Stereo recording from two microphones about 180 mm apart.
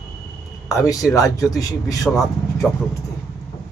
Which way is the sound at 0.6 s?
20° left (ahead or behind).